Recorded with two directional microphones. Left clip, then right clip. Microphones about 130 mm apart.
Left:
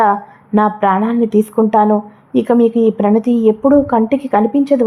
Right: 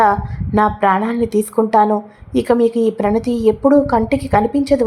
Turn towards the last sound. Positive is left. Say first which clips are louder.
# left 2 dB
turn(degrees=25)  # may be behind; listen again after turning